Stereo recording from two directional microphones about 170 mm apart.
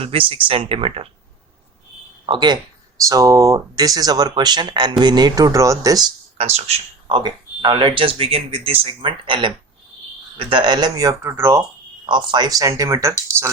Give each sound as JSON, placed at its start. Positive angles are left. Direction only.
{"t": 0.0, "sound": "speech", "side_deg": -30}
{"t": 2.2, "sound": "speech", "side_deg": -25}
{"t": 6.3, "sound": "speech", "side_deg": -40}
{"t": 7.2, "sound": "speech", "side_deg": -25}
{"t": 12.0, "sound": "speech", "side_deg": -25}